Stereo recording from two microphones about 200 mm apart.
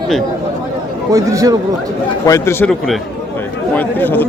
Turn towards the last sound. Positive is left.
turn(degrees=10)  # may be behind; listen again after turning